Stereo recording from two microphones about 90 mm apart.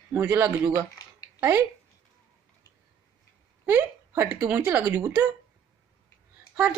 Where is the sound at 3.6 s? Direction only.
25° right (ahead or behind).